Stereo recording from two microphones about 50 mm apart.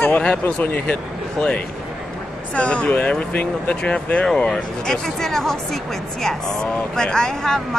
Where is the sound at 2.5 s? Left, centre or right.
Left.